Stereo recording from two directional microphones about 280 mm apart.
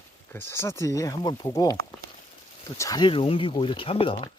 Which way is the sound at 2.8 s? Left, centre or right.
Centre.